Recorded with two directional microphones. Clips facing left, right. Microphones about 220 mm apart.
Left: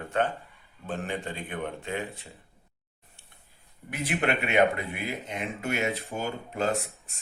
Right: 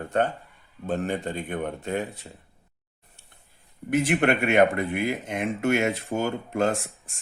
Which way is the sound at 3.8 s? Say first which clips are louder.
Right 7 dB; 50° right (ahead or behind).